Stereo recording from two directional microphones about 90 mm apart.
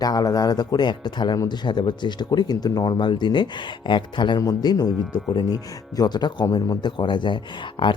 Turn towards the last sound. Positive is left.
turn(degrees=65)  # may be behind; listen again after turning